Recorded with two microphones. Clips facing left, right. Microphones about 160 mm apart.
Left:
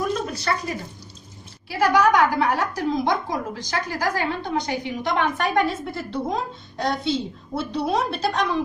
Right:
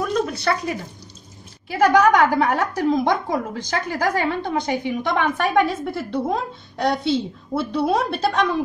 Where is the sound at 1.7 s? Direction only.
50° right (ahead or behind).